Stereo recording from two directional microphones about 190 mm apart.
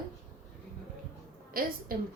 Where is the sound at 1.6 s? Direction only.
50° right (ahead or behind).